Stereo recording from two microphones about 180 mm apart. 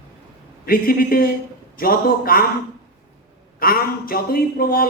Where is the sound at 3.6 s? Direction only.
55° left (ahead or behind).